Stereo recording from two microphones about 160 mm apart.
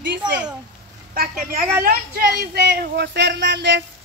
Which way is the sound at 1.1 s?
65° right (ahead or behind).